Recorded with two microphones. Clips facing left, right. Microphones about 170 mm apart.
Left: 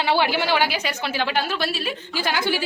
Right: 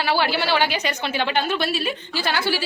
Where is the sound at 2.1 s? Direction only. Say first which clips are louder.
Left 1 dB; 15° left (ahead or behind).